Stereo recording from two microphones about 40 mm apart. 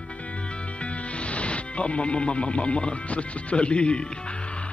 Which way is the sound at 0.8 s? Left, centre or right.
Left.